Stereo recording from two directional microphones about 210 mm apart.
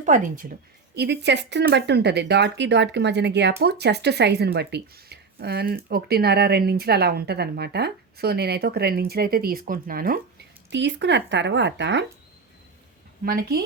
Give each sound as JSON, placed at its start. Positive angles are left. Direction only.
{"t": 0.0, "sound": "speech", "side_deg": -35}
{"t": 0.9, "sound": "speech", "side_deg": -55}
{"t": 13.2, "sound": "speech", "side_deg": -45}